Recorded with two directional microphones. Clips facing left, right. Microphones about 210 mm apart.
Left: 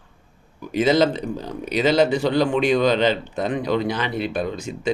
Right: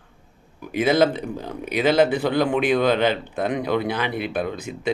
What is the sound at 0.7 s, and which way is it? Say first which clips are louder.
Speech: left 1 dB; 55° right (ahead or behind).